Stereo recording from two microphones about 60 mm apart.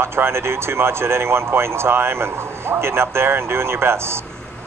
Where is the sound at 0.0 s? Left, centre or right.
Right.